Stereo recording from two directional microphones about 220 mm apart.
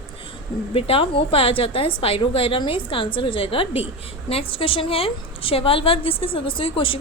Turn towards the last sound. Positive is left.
turn(degrees=25)  # may be behind; listen again after turning